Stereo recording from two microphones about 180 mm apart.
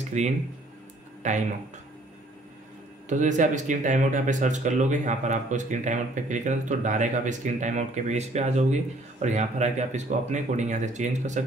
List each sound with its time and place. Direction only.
0.2 s speech: 40° right (ahead or behind)
3.1 s speech: 45° right (ahead or behind)